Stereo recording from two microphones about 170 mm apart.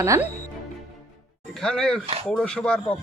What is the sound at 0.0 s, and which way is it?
Speech, 15° right (ahead or behind).